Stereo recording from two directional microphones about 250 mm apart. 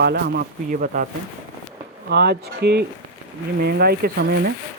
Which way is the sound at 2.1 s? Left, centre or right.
Right.